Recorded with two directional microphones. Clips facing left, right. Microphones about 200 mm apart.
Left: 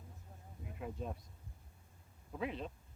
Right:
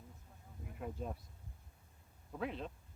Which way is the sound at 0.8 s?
Centre (ahead or behind).